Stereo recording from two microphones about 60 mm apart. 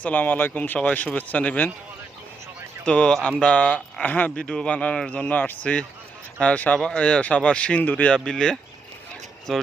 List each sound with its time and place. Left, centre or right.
0.0 s speech: left
0.8 s speech: left
2.8 s speech: centre
8.1 s speech: centre